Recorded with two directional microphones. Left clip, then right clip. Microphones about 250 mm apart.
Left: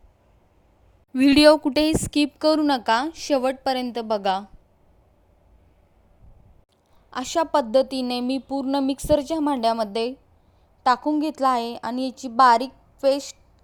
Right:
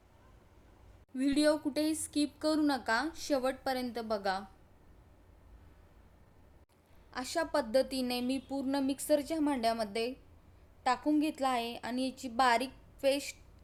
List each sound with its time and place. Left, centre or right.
1.1 s speech: left
7.1 s speech: left